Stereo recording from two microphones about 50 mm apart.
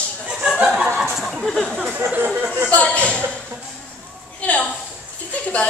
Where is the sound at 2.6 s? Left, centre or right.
Left.